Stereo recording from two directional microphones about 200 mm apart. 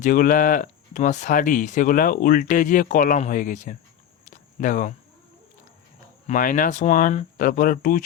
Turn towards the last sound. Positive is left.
turn(degrees=45)  # may be behind; listen again after turning